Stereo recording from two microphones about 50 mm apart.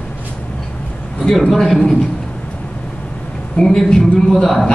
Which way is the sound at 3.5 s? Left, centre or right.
Centre.